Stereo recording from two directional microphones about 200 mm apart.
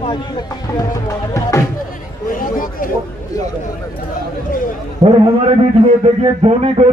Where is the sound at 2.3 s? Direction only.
45° left (ahead or behind).